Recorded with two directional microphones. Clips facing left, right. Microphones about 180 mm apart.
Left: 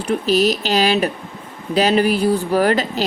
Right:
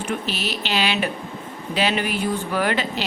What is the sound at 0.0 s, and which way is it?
Speech, 40° left (ahead or behind).